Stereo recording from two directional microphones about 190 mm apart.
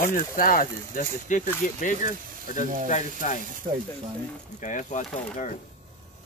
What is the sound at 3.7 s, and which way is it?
Speech, 40° right (ahead or behind).